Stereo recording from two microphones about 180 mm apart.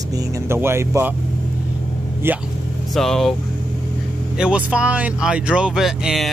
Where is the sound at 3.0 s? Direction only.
Centre (ahead or behind).